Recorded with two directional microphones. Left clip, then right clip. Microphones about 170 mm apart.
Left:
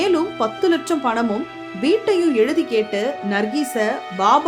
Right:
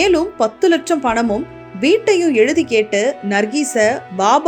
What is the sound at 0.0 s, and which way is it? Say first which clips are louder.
A woman's voice: right 4 dB; 15° right (ahead or behind).